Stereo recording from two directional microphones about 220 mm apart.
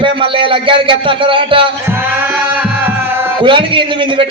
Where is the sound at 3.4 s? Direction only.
20° right (ahead or behind).